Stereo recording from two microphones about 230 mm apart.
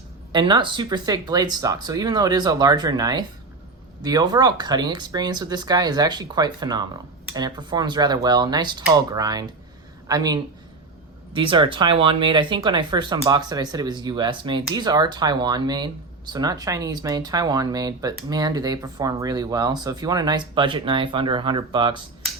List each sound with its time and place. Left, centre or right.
0.3 s speech: centre